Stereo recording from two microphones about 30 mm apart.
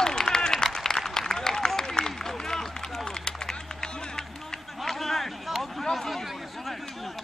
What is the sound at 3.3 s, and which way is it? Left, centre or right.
Run, left.